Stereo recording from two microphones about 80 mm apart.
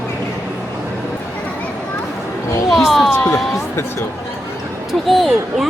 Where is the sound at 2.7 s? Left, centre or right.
Centre.